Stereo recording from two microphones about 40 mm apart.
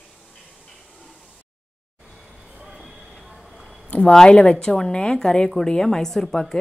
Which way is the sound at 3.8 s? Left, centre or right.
Left.